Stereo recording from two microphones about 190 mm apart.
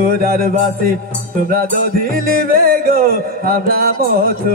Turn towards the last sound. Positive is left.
turn(degrees=-50)  # may be behind; listen again after turning